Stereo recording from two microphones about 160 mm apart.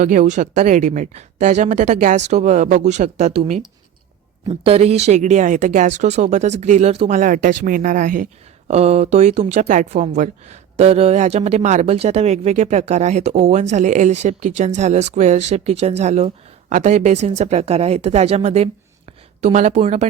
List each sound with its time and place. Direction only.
0.0 s speech: 50° right (ahead or behind)
4.6 s speech: 40° right (ahead or behind)
7.2 s speech: 60° right (ahead or behind); by 20.1 s 45° right (ahead or behind)